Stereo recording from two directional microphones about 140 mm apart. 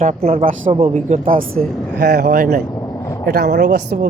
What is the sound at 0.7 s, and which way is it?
Speech, 50° right (ahead or behind).